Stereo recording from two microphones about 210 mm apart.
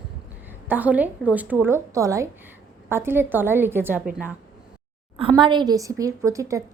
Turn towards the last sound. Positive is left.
turn(degrees=-15)  # may be behind; listen again after turning